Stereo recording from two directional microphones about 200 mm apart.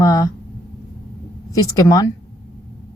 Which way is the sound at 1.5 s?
15° left (ahead or behind).